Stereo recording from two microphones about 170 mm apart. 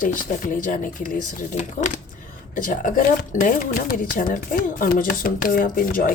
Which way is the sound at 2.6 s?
55° left (ahead or behind).